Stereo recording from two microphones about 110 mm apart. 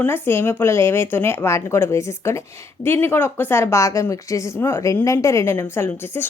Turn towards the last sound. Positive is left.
turn(degrees=20)  # may be behind; listen again after turning